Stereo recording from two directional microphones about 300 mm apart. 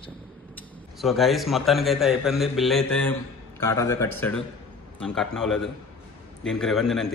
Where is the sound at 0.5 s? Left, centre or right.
Centre.